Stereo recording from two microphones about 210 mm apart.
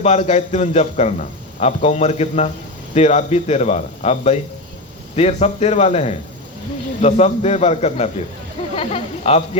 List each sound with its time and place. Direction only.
0.0 s speech: 30° left (ahead or behind)